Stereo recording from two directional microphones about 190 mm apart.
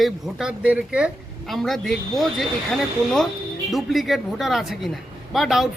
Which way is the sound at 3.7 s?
Centre (ahead or behind).